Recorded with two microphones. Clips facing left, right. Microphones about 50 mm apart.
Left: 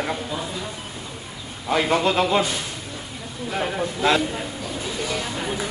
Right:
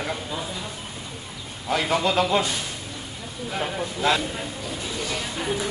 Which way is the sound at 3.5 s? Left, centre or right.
Centre.